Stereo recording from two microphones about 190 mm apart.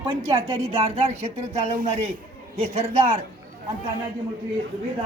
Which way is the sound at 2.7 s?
30° right (ahead or behind).